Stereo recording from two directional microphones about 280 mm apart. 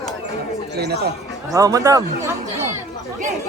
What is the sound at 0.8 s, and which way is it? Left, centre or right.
Speech, right.